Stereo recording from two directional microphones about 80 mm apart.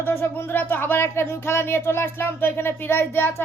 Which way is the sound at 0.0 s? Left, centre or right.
Left.